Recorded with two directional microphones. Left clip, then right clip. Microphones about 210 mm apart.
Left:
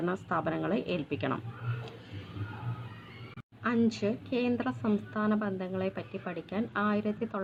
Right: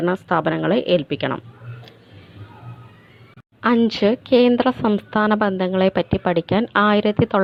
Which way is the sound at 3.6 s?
35° right (ahead or behind).